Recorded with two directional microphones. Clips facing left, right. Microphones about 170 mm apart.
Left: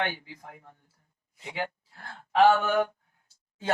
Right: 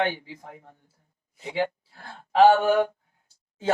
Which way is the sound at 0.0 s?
25° right (ahead or behind).